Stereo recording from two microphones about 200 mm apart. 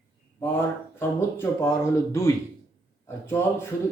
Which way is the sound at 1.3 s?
15° left (ahead or behind).